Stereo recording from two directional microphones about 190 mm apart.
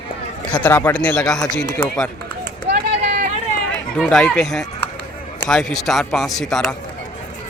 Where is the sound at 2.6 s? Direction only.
60° right (ahead or behind).